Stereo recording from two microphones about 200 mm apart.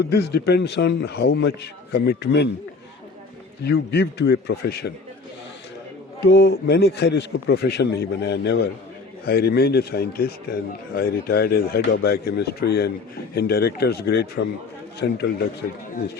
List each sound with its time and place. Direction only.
0.0 s a man's voice: 55° left (ahead or behind)
3.6 s a man's voice: 55° left (ahead or behind)
6.2 s a man's voice: 55° left (ahead or behind)